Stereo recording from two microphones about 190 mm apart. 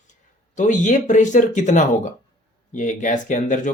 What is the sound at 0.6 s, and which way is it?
Speech, 40° left (ahead or behind).